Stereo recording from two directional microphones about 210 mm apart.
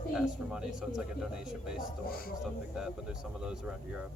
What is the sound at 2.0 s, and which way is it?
Speech, 45° left (ahead or behind).